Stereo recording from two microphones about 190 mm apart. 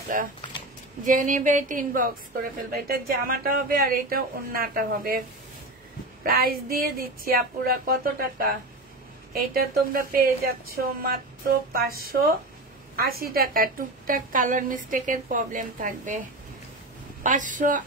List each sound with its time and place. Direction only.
0.4 s a sound: 25° left (ahead or behind)
1.0 s a woman's voice: 45° right (ahead or behind)
6.2 s a woman's voice: 50° right (ahead or behind)
17.2 s speech: 40° right (ahead or behind)